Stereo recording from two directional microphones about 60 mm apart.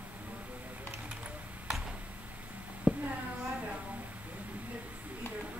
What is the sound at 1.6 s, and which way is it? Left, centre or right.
Tick-tock, centre.